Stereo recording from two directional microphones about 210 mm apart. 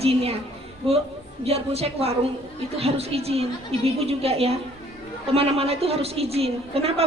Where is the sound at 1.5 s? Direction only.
30° right (ahead or behind).